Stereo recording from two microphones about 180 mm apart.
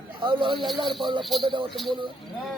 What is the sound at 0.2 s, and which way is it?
Speech, 25° right (ahead or behind).